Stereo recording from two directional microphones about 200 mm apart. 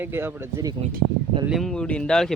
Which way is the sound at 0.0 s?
10° right (ahead or behind).